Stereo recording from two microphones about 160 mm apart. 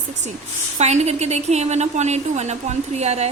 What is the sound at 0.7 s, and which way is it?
A woman's voice, 45° right (ahead or behind).